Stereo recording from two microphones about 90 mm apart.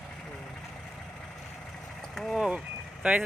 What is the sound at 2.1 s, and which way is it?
Speech, 5° left (ahead or behind).